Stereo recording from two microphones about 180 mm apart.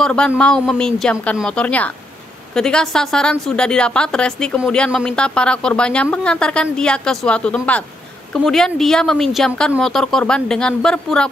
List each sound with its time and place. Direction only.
0.0 s a woman's voice: 5° left (ahead or behind)